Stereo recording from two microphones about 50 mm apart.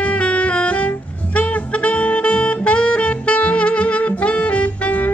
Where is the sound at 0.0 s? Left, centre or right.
Left.